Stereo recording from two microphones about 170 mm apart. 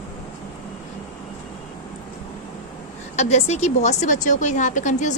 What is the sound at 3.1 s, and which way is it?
A woman's voice, 40° left (ahead or behind).